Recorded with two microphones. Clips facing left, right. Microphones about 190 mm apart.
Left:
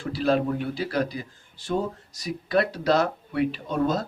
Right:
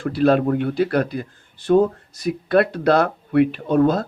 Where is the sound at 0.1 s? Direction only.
60° right (ahead or behind).